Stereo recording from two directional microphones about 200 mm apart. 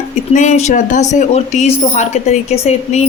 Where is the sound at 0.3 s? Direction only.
35° left (ahead or behind).